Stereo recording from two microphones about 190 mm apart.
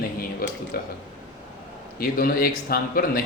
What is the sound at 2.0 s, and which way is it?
Speech, 50° left (ahead or behind).